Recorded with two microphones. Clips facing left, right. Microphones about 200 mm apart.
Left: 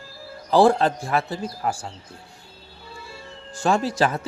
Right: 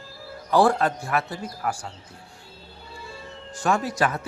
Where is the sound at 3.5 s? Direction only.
25° left (ahead or behind).